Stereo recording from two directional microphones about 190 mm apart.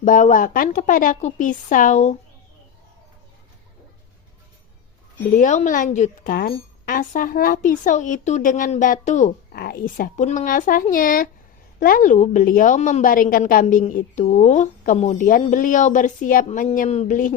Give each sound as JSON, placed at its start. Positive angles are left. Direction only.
{"t": 0.0, "sound": "a woman's voice", "side_deg": 45}
{"t": 5.4, "sound": "a woman's voice", "side_deg": 40}
{"t": 9.5, "sound": "a woman's voice", "side_deg": 55}